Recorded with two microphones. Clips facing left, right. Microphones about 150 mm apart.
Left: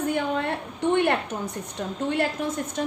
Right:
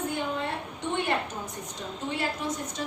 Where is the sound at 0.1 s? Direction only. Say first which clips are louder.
Left 5 dB; 60° left (ahead or behind).